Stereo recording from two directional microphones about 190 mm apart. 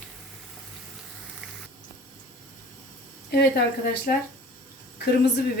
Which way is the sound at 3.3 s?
60° left (ahead or behind).